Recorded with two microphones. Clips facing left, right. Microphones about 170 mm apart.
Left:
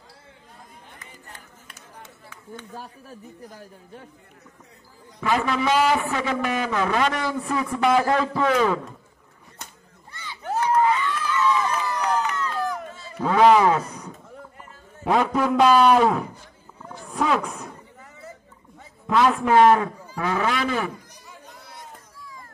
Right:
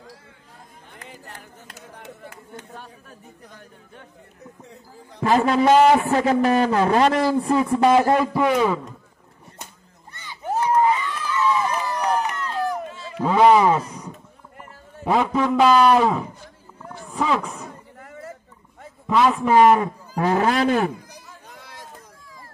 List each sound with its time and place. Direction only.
1.0 s music: 80° right
3.4 s a man's voice: 35° left (ahead or behind)
5.2 s a man's voice: 35° right (ahead or behind)
8.2 s a man's voice: 15° right (ahead or behind)
10.1 s a sound: 15° right (ahead or behind)
11.9 s run: 35° right (ahead or behind)
13.2 s a man's voice: 10° right (ahead or behind)
17.9 s a sound: 55° right (ahead or behind)
19.0 s a man's voice: centre (ahead or behind)
19.8 s a man's voice: 35° right (ahead or behind)